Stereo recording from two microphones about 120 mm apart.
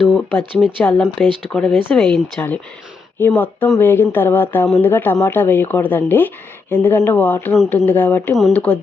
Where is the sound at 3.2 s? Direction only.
15° left (ahead or behind).